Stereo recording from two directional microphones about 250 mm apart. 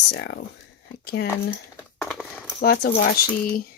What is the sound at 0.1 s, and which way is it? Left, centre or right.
Speech, left.